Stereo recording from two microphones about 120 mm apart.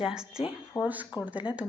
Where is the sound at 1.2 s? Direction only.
10° right (ahead or behind).